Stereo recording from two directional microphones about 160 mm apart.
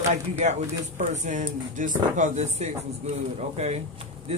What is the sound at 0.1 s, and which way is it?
Speech, 45° right (ahead or behind).